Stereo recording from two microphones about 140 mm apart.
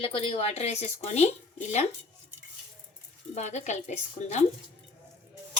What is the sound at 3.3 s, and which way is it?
A woman's voice, 55° left (ahead or behind).